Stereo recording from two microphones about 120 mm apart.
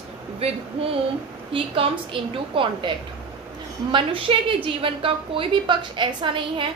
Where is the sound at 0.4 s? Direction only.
55° right (ahead or behind).